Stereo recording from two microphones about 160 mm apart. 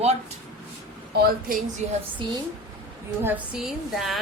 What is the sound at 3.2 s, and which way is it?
Speech, 5° right (ahead or behind).